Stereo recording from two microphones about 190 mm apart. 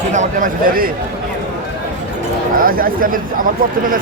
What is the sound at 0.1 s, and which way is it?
Speech, 40° right (ahead or behind).